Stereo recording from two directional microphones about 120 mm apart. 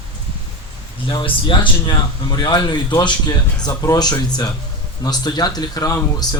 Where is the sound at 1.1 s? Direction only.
40° left (ahead or behind).